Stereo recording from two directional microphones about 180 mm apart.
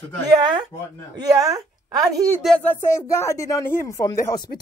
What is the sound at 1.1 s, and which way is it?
Speech, 20° right (ahead or behind).